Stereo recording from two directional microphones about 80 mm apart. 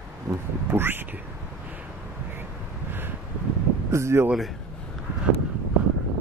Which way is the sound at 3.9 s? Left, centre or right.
Right.